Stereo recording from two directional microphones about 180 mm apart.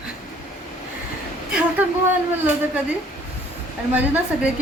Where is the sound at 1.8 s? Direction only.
10° right (ahead or behind).